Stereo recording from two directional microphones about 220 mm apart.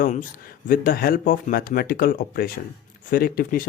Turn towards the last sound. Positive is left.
turn(degrees=40)  # may be behind; listen again after turning